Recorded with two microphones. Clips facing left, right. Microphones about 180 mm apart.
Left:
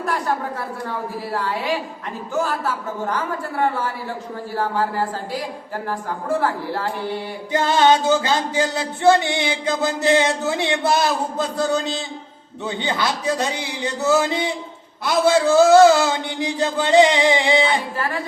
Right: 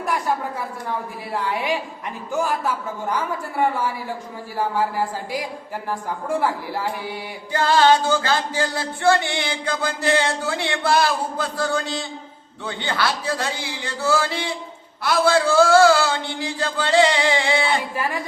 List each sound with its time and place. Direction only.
0.0 s a woman's voice: 10° right (ahead or behind)
4.5 s speech: 10° right (ahead or behind)
7.5 s music: 20° left (ahead or behind)
17.9 s speech: 15° right (ahead or behind)